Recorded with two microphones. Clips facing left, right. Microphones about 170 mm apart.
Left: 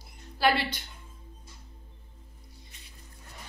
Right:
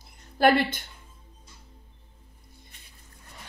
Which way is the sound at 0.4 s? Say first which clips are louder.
Right 5 dB; 50° right (ahead or behind).